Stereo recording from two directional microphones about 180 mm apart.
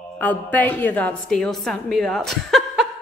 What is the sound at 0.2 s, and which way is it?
A woman's voice, 10° left (ahead or behind).